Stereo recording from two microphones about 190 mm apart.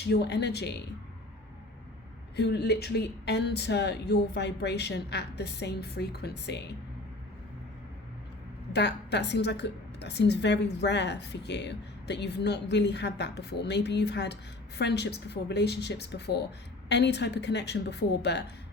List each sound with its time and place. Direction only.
0.0 s a woman's voice: 60° left (ahead or behind)
2.3 s a woman's voice: 60° left (ahead or behind)
8.7 s a woman's voice: 65° left (ahead or behind)